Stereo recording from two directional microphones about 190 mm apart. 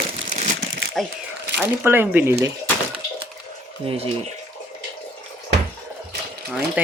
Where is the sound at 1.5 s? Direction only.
10° right (ahead or behind).